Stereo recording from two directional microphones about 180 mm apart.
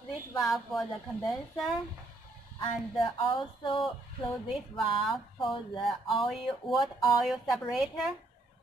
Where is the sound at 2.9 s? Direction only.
25° left (ahead or behind).